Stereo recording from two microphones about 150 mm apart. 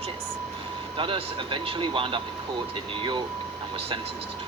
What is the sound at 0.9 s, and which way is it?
Speech, 35° right (ahead or behind).